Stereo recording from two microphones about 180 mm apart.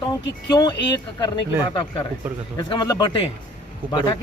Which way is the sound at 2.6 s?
25° left (ahead or behind).